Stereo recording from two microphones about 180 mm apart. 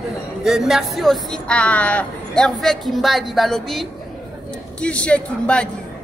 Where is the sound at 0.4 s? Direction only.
Centre (ahead or behind).